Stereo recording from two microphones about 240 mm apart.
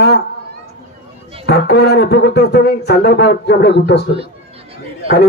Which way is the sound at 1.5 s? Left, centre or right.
Left.